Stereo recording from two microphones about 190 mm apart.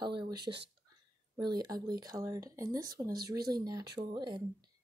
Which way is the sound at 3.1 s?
55° right (ahead or behind).